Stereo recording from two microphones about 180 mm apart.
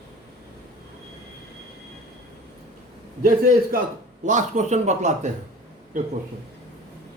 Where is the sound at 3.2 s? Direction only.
50° right (ahead or behind).